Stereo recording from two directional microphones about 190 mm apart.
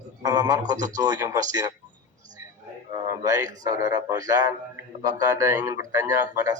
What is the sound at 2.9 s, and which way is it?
A man's voice, 20° right (ahead or behind).